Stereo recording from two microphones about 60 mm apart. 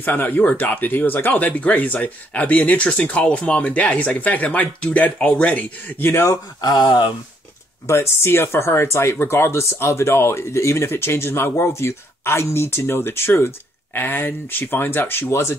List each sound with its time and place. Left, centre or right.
0.0 s speech: left
5.9 s speech: left
6.2 s speech: left
7.8 s speech: left